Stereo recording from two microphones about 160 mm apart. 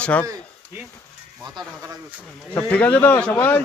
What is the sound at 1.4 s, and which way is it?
Speech, 25° right (ahead or behind).